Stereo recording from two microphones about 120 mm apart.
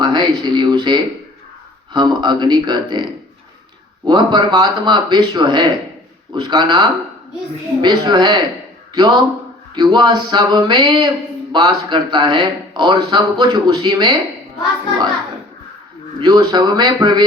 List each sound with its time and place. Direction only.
0.0 s a sound: 40° right (ahead or behind)
1.9 s speech: 40° right (ahead or behind)
4.0 s speech: 35° right (ahead or behind)
16.2 s speech: 35° right (ahead or behind)